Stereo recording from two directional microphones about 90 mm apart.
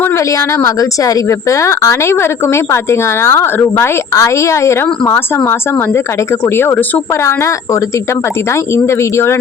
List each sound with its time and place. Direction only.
0.0 s a woman's voice: 35° left (ahead or behind)
6.4 s speech: 30° left (ahead or behind)
7.3 s a woman's voice: 35° left (ahead or behind)